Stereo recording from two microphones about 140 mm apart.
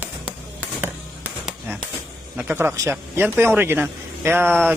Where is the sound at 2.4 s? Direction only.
15° right (ahead or behind).